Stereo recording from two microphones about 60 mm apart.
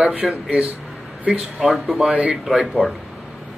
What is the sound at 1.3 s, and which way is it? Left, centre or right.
Speech, centre.